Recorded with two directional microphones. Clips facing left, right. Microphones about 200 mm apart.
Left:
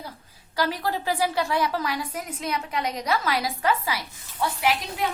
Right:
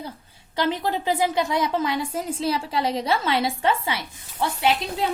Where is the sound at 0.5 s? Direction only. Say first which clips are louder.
Right 2 dB; 25° right (ahead or behind).